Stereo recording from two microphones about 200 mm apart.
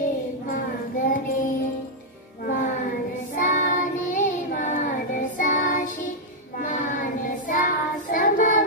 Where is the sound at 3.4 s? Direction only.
40° left (ahead or behind).